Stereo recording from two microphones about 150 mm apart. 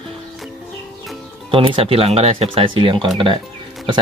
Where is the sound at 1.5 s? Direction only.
35° right (ahead or behind).